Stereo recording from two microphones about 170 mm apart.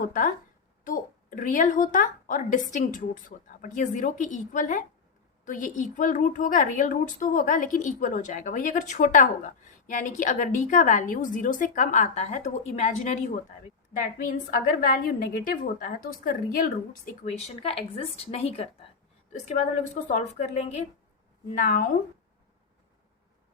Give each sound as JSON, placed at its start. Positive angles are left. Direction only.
{"t": 0.0, "sound": "a woman's voice", "side_deg": 55}
{"t": 17.2, "sound": "speech", "side_deg": 35}
{"t": 19.3, "sound": "a woman's voice", "side_deg": 45}
{"t": 21.5, "sound": "a woman's voice", "side_deg": 55}